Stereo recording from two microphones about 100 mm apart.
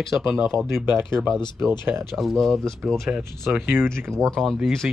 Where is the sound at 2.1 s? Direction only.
Centre (ahead or behind).